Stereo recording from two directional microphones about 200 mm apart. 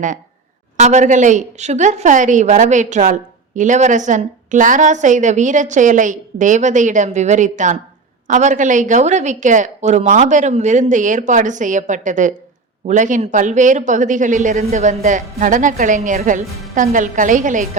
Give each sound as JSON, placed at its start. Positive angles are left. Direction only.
{"t": 0.8, "sound": "a woman's voice", "side_deg": -35}